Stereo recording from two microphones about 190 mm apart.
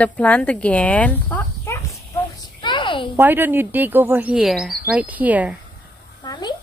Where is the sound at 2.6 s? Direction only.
25° left (ahead or behind).